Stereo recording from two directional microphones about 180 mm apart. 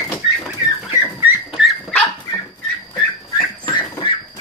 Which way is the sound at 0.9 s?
10° right (ahead or behind).